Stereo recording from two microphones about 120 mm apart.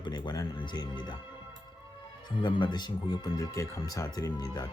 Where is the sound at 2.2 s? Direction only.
40° left (ahead or behind).